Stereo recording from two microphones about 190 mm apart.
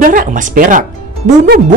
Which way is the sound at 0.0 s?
45° right (ahead or behind).